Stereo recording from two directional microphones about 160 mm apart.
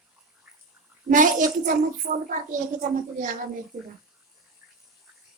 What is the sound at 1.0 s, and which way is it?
A woman's voice, 55° right (ahead or behind).